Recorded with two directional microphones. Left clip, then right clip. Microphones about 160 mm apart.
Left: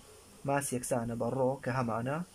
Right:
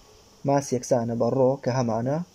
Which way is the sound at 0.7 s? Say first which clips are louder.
Right 10 dB; 25° right (ahead or behind).